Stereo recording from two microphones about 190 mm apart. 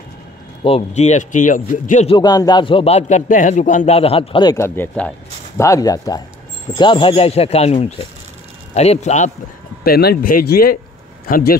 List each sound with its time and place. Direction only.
0.7 s speech: 35° left (ahead or behind)
2.1 s a man's voice: 20° left (ahead or behind); by 9.3 s 35° left (ahead or behind)
9.8 s speech: 55° left (ahead or behind)